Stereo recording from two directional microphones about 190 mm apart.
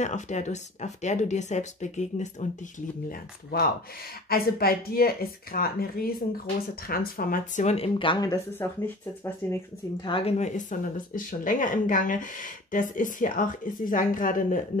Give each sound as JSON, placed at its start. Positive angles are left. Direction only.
{"t": 0.0, "sound": "speech", "side_deg": 40}
{"t": 10.0, "sound": "speech", "side_deg": 30}